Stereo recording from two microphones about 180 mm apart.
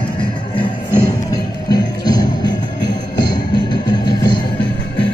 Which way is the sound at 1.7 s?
20° left (ahead or behind).